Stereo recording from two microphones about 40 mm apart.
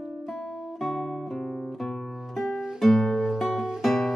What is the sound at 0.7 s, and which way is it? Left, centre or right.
Guitar, centre.